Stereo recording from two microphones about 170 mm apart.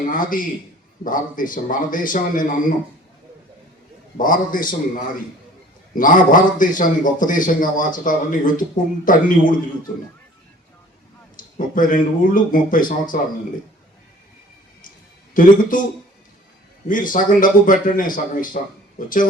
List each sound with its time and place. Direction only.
0.1 s a man's voice: 55° left (ahead or behind)
4.2 s a man's voice: 55° left (ahead or behind)
5.9 s a man's voice: 55° left (ahead or behind)
11.3 s a man's voice: 55° left (ahead or behind)
15.3 s a man's voice: 50° left (ahead or behind)
16.9 s a man's voice: 50° left (ahead or behind)